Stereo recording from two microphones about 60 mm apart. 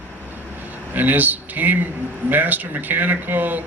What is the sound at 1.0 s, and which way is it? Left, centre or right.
Speech, right.